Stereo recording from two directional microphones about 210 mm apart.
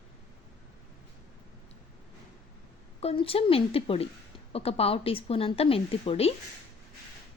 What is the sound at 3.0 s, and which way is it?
A woman's voice, 30° left (ahead or behind).